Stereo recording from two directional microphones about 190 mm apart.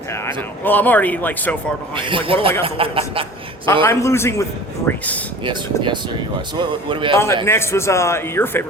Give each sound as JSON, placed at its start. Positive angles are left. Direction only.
{"t": 0.6, "sound": "a man's voice", "side_deg": 10}
{"t": 2.0, "sound": "a man's voice", "side_deg": -25}
{"t": 3.8, "sound": "a man's voice", "side_deg": 15}
{"t": 5.5, "sound": "a man's voice", "side_deg": -25}
{"t": 7.4, "sound": "a man's voice", "side_deg": 15}